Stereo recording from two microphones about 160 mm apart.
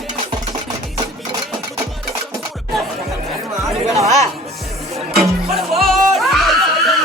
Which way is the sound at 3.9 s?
45° right (ahead or behind).